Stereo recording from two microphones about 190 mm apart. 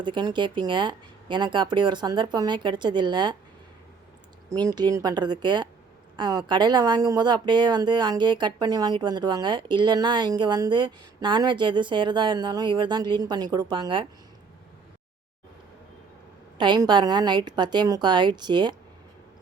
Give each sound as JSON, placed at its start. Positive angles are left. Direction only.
{"t": 0.0, "sound": "speech", "side_deg": -25}
{"t": 4.4, "sound": "speech", "side_deg": -20}
{"t": 16.6, "sound": "speech", "side_deg": -25}